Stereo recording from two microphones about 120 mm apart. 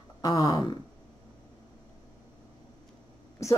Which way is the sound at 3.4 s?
25° left (ahead or behind).